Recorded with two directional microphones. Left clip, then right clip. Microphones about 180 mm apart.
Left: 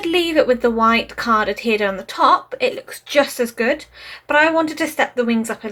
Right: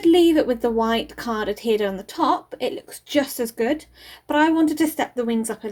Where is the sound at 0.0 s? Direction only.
45° right (ahead or behind).